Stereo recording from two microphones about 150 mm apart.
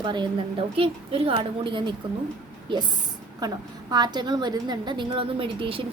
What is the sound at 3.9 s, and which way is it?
A woman's voice, 30° right (ahead or behind).